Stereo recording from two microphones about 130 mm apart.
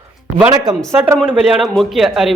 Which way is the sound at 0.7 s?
15° right (ahead or behind).